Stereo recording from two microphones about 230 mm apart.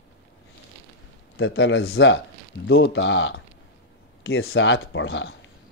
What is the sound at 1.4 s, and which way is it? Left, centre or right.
Speech, left.